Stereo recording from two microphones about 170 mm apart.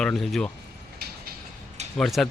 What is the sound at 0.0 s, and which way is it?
Speech, centre (ahead or behind).